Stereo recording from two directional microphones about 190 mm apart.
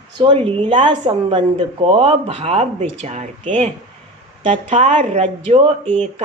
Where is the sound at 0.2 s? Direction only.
25° right (ahead or behind).